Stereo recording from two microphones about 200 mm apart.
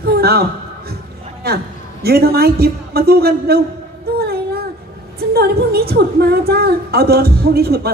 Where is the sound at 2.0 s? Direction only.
50° right (ahead or behind).